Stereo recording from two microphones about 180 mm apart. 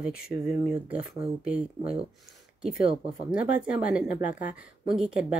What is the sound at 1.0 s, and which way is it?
Speech, 55° left (ahead or behind).